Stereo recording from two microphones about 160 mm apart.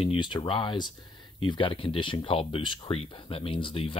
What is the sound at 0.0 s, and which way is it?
Speech, 30° left (ahead or behind).